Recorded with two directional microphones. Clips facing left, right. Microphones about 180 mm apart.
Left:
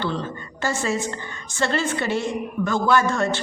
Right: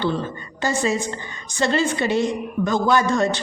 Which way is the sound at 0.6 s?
15° right (ahead or behind).